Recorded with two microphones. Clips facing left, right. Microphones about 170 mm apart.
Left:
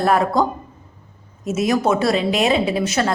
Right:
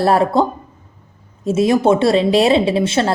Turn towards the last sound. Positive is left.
turn(degrees=-25)  # may be behind; listen again after turning